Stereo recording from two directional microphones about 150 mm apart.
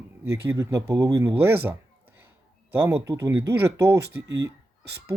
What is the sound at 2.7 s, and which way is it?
Speech, 15° right (ahead or behind).